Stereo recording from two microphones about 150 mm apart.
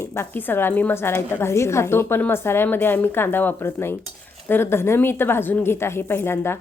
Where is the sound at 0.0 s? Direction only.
15° left (ahead or behind).